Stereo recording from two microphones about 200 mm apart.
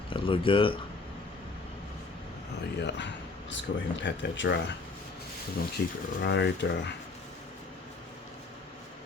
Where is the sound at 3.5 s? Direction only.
65° left (ahead or behind).